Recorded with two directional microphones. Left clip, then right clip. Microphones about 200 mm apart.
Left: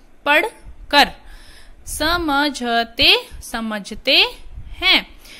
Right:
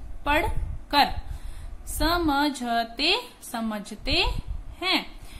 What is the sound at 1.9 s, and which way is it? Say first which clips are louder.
A woman's voice: left 6 dB; 30° left (ahead or behind).